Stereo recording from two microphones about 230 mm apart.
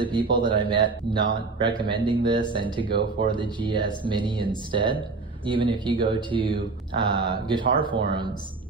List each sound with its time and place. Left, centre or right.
0.0 s a man's voice: right